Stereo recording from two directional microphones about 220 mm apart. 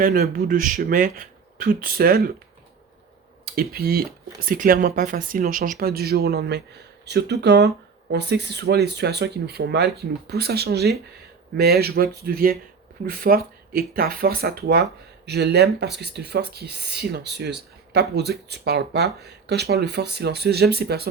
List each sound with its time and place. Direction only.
0.0 s speech: 40° right (ahead or behind)
3.4 s speech: 45° right (ahead or behind)